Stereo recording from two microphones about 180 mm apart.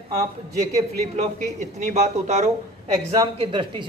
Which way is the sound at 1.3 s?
40° right (ahead or behind).